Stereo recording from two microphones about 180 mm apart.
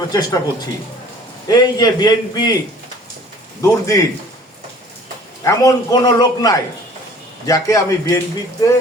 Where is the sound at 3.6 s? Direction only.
15° left (ahead or behind).